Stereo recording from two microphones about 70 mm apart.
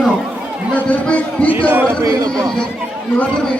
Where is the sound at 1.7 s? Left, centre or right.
Right.